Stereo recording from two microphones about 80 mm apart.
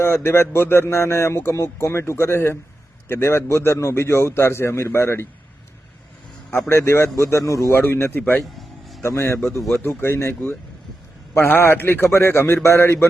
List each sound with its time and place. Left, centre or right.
0.0 s speech: left
6.7 s speech: left
7.8 s speech: left
8.5 s music: centre
9.0 s speech: left
9.4 s speech: centre
9.8 s speech: left
11.3 s speech: left